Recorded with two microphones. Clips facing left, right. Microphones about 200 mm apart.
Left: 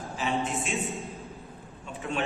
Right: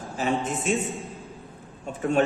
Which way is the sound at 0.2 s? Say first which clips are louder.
Right 4 dB; 45° right (ahead or behind).